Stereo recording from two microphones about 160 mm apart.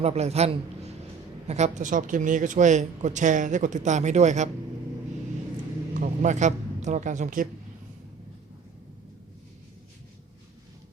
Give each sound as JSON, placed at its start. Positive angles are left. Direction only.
{"t": 0.0, "sound": "a man's voice", "side_deg": -40}
{"t": 6.0, "sound": "speech", "side_deg": -50}